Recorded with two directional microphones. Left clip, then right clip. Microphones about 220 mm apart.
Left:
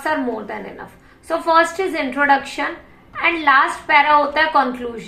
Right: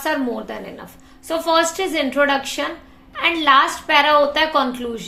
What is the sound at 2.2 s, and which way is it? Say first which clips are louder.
Speech: left 3 dB; 45° right (ahead or behind).